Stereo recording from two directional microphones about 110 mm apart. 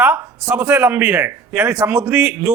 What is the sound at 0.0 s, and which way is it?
Speech, 15° right (ahead or behind).